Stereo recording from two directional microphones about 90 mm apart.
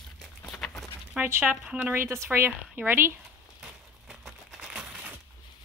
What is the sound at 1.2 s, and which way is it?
Speech, 25° right (ahead or behind).